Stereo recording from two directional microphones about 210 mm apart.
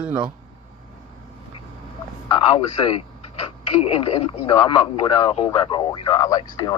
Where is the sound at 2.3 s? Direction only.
25° left (ahead or behind).